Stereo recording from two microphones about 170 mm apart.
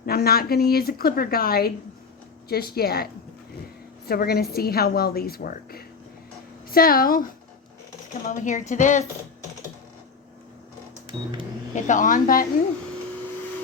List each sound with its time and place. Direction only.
0.0 s a woman's voice: 65° left (ahead or behind)
8.3 s speech: 45° left (ahead or behind)
11.7 s speech: 50° left (ahead or behind)